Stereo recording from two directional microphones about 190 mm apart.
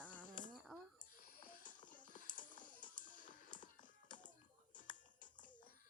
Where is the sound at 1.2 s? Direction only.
50° left (ahead or behind).